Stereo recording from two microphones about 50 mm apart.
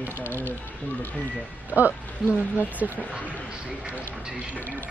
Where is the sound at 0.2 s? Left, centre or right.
Left.